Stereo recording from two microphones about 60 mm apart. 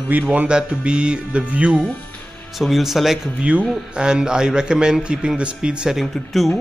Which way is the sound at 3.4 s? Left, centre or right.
Right.